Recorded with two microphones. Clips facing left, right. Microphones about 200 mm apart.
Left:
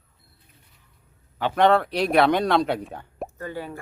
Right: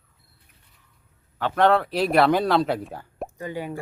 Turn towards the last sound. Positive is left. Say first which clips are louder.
# right 2 dB
turn(degrees=-15)  # may be behind; listen again after turning